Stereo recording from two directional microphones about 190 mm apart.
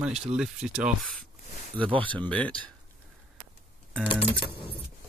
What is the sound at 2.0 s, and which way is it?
Speech, 5° left (ahead or behind).